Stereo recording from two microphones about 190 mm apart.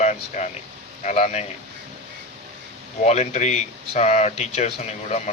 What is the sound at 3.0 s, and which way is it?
Speech, 35° left (ahead or behind).